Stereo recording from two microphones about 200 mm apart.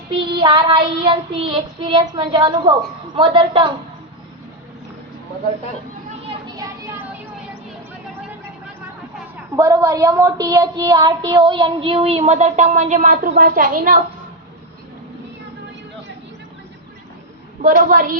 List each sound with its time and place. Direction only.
0.3 s a woman's voice: 25° right (ahead or behind)
6.6 s a sound: 10° right (ahead or behind)
9.6 s a woman's voice: 15° right (ahead or behind); by 14.0 s 40° right (ahead or behind)
17.8 s a woman's voice: 40° right (ahead or behind)